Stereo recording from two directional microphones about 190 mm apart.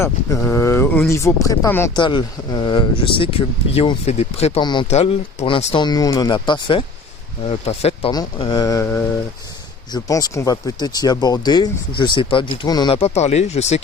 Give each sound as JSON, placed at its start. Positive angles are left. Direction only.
{"t": 0.0, "sound": "speech", "side_deg": 15}
{"t": 4.9, "sound": "speech", "side_deg": 35}